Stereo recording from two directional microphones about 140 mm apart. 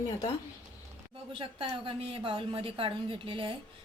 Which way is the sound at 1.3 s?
40° right (ahead or behind).